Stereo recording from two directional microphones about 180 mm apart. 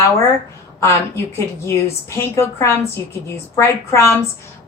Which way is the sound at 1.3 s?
15° left (ahead or behind).